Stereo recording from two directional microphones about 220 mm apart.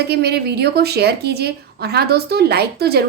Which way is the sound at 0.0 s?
50° right (ahead or behind).